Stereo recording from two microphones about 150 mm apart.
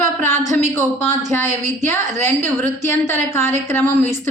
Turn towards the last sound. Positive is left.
turn(degrees=15)  # may be behind; listen again after turning